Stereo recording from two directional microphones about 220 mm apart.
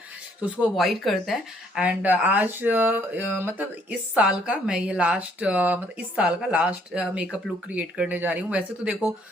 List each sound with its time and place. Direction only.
0.6 s speech: centre (ahead or behind)